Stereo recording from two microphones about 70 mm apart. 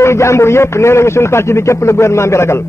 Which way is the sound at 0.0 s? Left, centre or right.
Left.